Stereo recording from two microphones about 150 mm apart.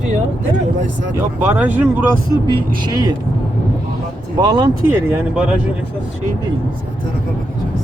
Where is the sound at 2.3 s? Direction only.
30° right (ahead or behind).